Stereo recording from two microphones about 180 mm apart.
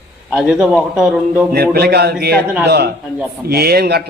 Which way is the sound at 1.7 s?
60° right (ahead or behind).